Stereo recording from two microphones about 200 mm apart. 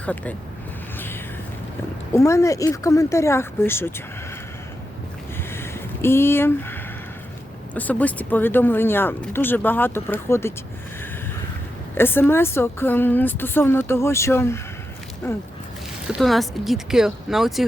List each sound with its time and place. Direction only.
0.0 s speech: 5° left (ahead or behind)
0.9 s a sound: 10° left (ahead or behind)
2.1 s speech: 15° left (ahead or behind)
5.5 s a sound: 10° left (ahead or behind)
7.7 s speech: 10° left (ahead or behind)
11.9 s speech: 10° left (ahead or behind)
16.0 s speech: centre (ahead or behind)